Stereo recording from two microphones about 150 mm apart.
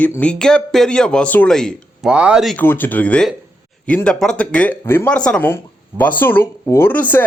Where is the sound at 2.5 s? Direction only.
15° left (ahead or behind).